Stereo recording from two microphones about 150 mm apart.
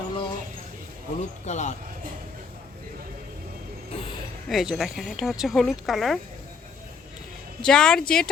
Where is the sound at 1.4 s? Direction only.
50° left (ahead or behind).